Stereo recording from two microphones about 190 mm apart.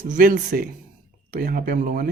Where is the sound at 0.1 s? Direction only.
50° right (ahead or behind).